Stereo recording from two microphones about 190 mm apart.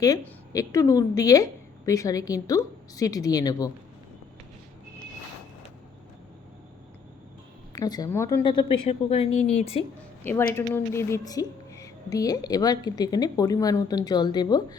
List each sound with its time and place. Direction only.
0.0 s a woman's voice: 20° left (ahead or behind)
7.7 s a woman's voice: 20° left (ahead or behind)
8.4 s a woman's voice: 25° left (ahead or behind)
10.5 s a woman's voice: 15° left (ahead or behind)